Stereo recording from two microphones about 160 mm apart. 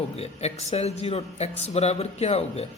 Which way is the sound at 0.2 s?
40° left (ahead or behind).